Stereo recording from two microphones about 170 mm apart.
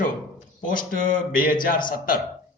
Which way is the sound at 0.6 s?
55° left (ahead or behind).